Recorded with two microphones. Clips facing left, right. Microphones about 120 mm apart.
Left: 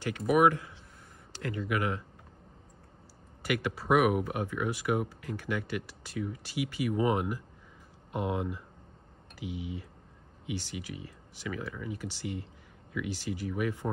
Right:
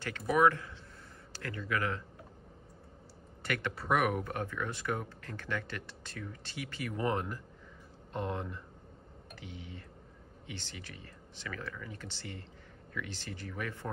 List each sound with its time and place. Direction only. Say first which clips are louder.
0.3 s speech: left 3 dB; 15° left (ahead or behind)
3.4 s speech: left 4 dB; 5° left (ahead or behind)